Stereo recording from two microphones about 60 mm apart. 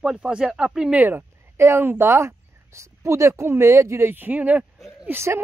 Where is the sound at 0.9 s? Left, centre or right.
Right.